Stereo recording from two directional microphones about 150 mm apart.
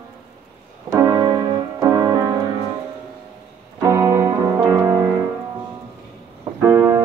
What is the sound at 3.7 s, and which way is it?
Music, 20° right (ahead or behind).